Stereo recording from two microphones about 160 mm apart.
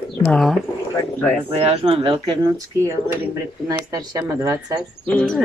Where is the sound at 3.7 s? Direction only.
25° right (ahead or behind).